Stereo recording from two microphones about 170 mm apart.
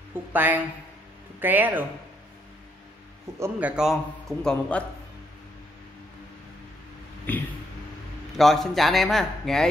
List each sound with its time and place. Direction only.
0.1 s a woman's voice: 10° right (ahead or behind)
3.3 s a man's voice: 10° right (ahead or behind); by 4.8 s 5° left (ahead or behind)
7.3 s a sound: 10° left (ahead or behind)
8.4 s a man's voice: centre (ahead or behind)